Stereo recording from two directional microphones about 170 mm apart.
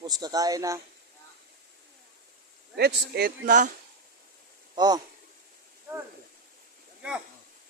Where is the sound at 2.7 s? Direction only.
70° right (ahead or behind); by 3.7 s 50° right (ahead or behind).